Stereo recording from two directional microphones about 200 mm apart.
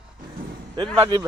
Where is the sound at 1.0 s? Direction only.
20° right (ahead or behind).